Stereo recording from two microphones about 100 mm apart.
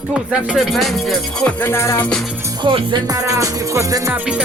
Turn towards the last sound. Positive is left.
turn(degrees=-35)  # may be behind; listen again after turning